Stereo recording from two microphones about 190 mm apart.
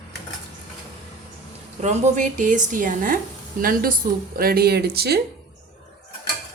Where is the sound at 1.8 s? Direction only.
40° right (ahead or behind); by 5.2 s 55° right (ahead or behind).